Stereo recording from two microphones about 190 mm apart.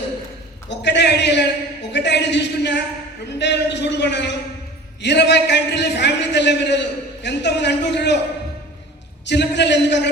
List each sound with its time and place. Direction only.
0.7 s a sound: 65° left (ahead or behind)
1.9 s a man's voice: 65° left (ahead or behind)
9.2 s a man's voice: 65° left (ahead or behind)